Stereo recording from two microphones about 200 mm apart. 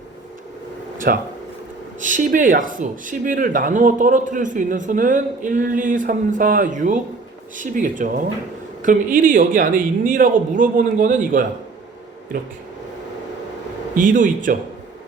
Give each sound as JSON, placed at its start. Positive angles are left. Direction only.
{"t": 1.1, "sound": "speech", "side_deg": -50}
{"t": 13.9, "sound": "speech", "side_deg": -40}